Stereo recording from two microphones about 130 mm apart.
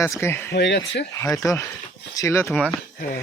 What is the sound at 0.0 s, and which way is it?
Speech, 20° left (ahead or behind).